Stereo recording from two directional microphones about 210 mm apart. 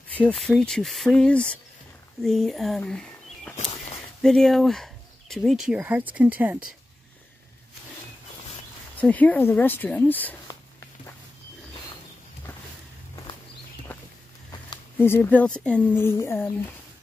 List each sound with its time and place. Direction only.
0.2 s speech: 5° left (ahead or behind)
3.5 s a sound: 35° left (ahead or behind)
4.2 s speech: centre (ahead or behind)
9.0 s speech: 5° left (ahead or behind)
13.9 s walk: 10° left (ahead or behind)
15.0 s speech: 10° left (ahead or behind)